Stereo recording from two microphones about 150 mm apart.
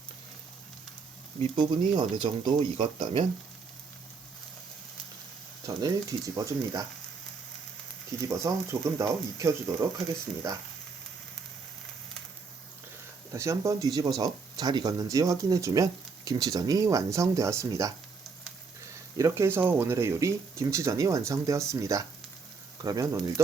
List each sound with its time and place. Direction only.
1.4 s speech: 35° right (ahead or behind)
2.7 s speech: 40° right (ahead or behind)
5.6 s speech: 20° right (ahead or behind)
8.2 s speech: 20° right (ahead or behind)
13.3 s speech: 20° right (ahead or behind)
19.1 s speech: 20° right (ahead or behind)